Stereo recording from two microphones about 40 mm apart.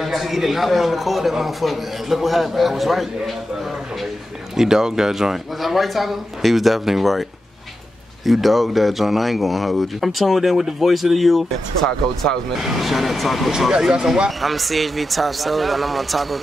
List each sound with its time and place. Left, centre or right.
0.0 s speech: centre
4.6 s speech: centre
8.3 s speech: centre
11.8 s speech: centre
12.6 s speech: centre
13.5 s speech: centre
14.4 s speech: centre